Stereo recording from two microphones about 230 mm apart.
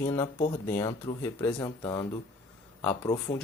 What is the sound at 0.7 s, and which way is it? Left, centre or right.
Speech, centre.